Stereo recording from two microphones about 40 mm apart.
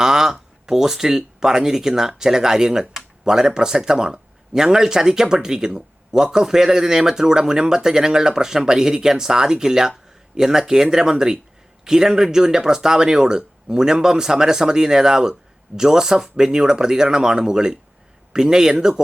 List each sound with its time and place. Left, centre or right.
0.0 s speech: centre